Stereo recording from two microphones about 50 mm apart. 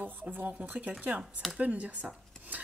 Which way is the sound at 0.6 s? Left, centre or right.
Right.